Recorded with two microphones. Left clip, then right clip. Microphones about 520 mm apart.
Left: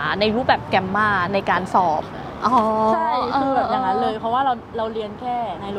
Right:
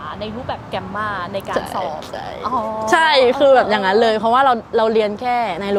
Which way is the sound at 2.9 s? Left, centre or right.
Right.